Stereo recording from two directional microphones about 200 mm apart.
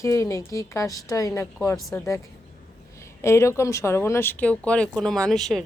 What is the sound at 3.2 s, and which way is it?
A woman's voice, 15° left (ahead or behind).